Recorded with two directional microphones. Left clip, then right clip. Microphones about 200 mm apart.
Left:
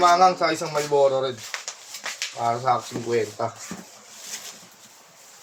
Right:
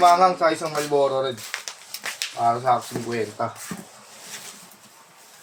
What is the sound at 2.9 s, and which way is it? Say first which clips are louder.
Speech: right 1 dB; 45° right (ahead or behind).